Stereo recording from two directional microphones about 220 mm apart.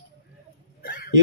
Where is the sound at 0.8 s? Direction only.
40° left (ahead or behind).